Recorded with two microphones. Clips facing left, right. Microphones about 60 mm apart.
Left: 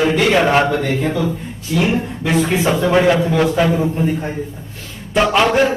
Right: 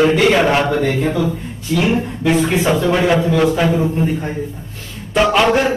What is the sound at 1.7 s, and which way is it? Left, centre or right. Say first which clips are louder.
Speech: right 1 dB; centre.